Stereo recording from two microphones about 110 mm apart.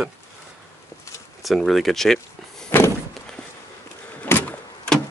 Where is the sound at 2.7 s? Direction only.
20° left (ahead or behind).